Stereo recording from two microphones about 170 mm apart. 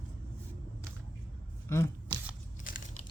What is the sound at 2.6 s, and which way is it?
Biting, 55° left (ahead or behind).